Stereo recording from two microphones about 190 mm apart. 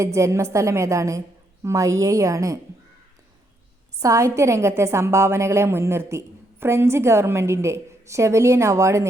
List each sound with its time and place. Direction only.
0.0 s a woman's voice: 15° right (ahead or behind)
4.0 s a woman's voice: 15° right (ahead or behind)